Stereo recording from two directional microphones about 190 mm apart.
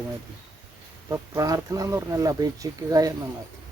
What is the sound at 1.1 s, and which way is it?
Speech, 15° right (ahead or behind).